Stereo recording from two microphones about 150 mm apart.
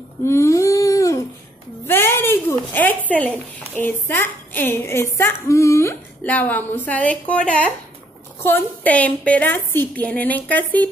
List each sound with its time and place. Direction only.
0.2 s humming: 20° left (ahead or behind)
1.9 s a sound: 15° left (ahead or behind)
3.1 s a woman's voice: 10° left (ahead or behind)